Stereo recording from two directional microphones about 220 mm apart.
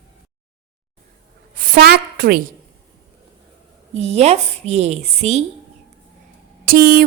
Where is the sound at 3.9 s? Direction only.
30° right (ahead or behind).